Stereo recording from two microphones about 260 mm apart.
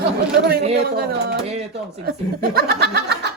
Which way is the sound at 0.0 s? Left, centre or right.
Right.